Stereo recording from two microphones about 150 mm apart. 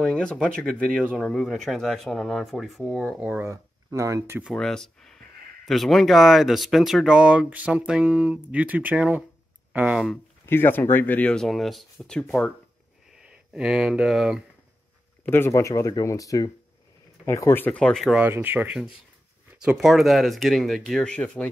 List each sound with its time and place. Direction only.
0.0 s speech: 5° left (ahead or behind)
3.2 s speech: 10° right (ahead or behind)
4.6 s speech: 5° left (ahead or behind)
10.4 s speech: 15° left (ahead or behind); by 14.4 s centre (ahead or behind)
15.2 s speech: 15° left (ahead or behind); by 18.2 s centre (ahead or behind)
18.2 s speech: 10° right (ahead or behind); by 21.5 s 5° left (ahead or behind)